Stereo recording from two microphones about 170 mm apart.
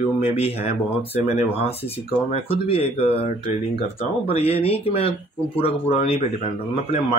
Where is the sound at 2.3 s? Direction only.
35° left (ahead or behind).